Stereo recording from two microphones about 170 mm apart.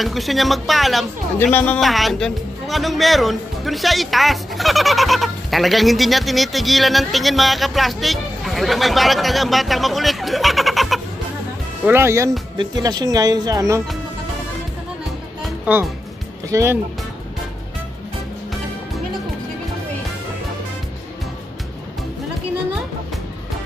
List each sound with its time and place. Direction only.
0.0 s speech: centre (ahead or behind)
1.4 s speech: 10° left (ahead or behind)
1.8 s speech: centre (ahead or behind)
11.8 s speech: 15° right (ahead or behind)
15.4 s music: 5° right (ahead or behind)
16.4 s speech: 20° right (ahead or behind)